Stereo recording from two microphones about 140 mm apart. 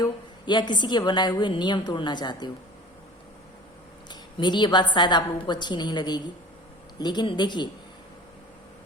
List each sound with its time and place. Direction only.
0.0 s a woman's voice: 30° left (ahead or behind)
4.1 s a woman's voice: 35° left (ahead or behind)